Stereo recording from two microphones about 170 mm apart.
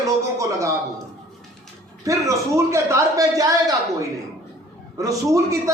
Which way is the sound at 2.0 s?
20° right (ahead or behind).